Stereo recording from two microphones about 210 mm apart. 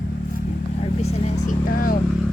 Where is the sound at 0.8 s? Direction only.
30° left (ahead or behind).